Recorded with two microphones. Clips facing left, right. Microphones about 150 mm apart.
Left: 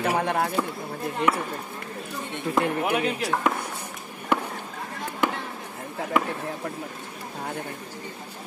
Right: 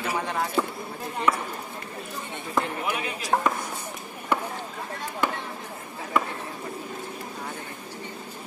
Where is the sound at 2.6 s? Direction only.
65° left (ahead or behind).